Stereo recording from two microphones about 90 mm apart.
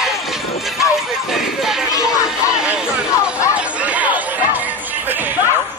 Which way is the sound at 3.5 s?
15° right (ahead or behind).